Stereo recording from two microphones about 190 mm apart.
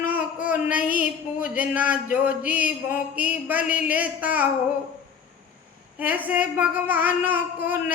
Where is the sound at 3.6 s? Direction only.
50° left (ahead or behind).